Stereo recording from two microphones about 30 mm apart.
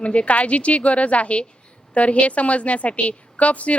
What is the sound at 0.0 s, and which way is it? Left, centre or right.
A woman's voice, left.